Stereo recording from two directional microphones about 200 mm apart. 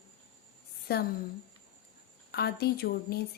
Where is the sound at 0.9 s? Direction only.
50° left (ahead or behind).